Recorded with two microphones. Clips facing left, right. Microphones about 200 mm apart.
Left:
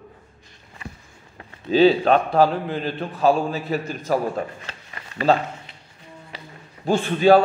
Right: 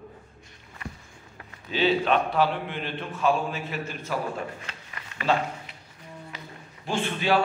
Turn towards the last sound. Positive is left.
turn(degrees=40)  # may be behind; listen again after turning